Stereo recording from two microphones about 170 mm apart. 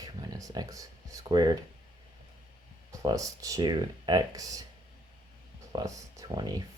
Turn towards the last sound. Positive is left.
turn(degrees=-25)  # may be behind; listen again after turning